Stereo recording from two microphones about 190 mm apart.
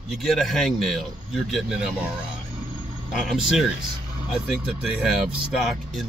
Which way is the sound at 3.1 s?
Centre (ahead or behind).